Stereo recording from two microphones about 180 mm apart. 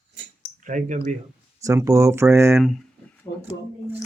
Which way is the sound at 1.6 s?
15° right (ahead or behind).